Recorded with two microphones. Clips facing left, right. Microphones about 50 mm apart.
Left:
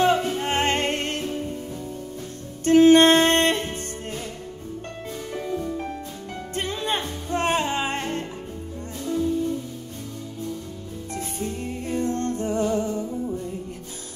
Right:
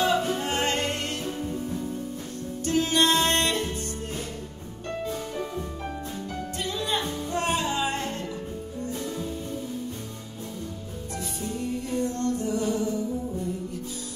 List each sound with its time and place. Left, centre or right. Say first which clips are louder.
0.0 s music: left 3 dB; left
2.6 s music: left 10 dB; left
6.5 s music: left 3 dB; left
11.9 s music: left 3 dB; left